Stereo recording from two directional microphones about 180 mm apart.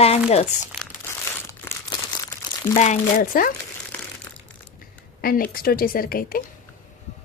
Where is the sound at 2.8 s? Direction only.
45° left (ahead or behind).